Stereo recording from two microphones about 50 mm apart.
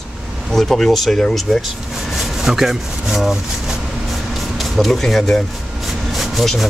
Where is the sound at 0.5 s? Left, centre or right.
Centre.